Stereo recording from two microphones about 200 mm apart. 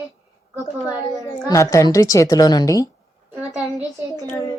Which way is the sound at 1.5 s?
15° left (ahead or behind).